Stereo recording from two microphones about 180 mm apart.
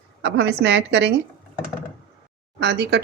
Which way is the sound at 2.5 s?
70° right (ahead or behind).